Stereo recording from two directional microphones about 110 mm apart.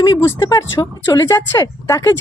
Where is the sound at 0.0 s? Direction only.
40° left (ahead or behind).